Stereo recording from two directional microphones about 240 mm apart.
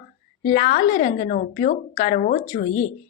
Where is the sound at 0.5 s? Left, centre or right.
Left.